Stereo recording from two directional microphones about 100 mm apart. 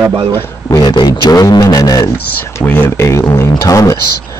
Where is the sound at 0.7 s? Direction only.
50° left (ahead or behind).